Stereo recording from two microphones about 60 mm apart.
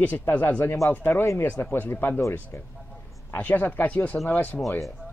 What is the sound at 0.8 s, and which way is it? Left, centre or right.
A man's voice, left.